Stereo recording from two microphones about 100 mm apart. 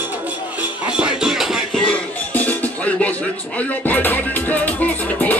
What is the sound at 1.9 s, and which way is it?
Music, 15° left (ahead or behind).